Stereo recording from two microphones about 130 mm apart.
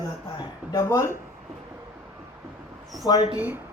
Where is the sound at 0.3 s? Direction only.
30° left (ahead or behind).